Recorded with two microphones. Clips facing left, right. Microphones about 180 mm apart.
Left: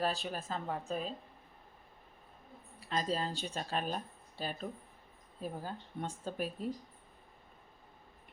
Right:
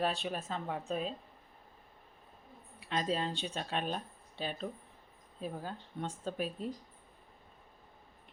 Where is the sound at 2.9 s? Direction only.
Centre (ahead or behind).